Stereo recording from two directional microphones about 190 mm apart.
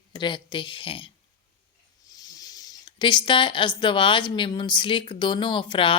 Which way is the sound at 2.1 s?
20° left (ahead or behind).